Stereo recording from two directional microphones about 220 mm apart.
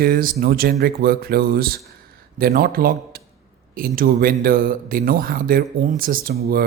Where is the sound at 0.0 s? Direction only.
40° right (ahead or behind).